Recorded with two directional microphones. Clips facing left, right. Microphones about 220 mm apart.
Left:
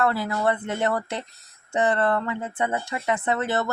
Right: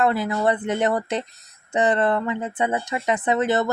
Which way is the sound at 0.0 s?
20° right (ahead or behind).